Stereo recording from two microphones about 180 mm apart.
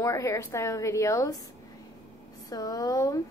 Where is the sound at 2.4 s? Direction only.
20° left (ahead or behind).